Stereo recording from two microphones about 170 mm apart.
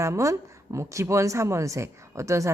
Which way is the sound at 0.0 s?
20° right (ahead or behind).